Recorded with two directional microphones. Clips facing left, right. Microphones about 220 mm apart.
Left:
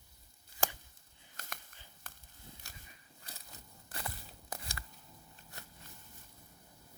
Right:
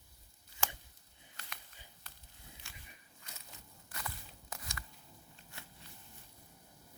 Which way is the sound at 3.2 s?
35° left (ahead or behind).